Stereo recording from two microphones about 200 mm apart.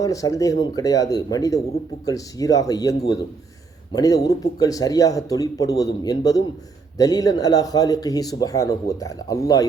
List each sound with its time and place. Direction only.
0.0 s speech: 15° left (ahead or behind)
3.9 s speech: 20° left (ahead or behind)